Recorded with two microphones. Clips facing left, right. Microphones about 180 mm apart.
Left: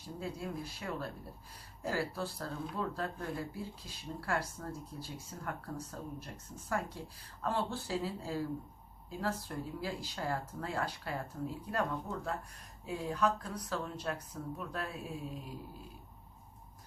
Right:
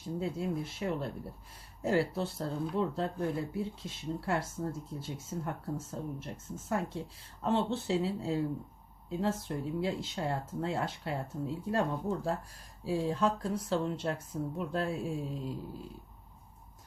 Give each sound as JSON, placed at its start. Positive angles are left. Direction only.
{"t": 0.2, "sound": "speech", "side_deg": -25}